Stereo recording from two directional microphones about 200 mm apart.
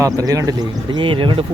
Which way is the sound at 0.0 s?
15° right (ahead or behind).